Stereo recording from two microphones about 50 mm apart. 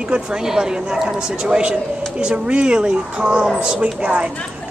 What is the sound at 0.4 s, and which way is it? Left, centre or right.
A man's voice, centre.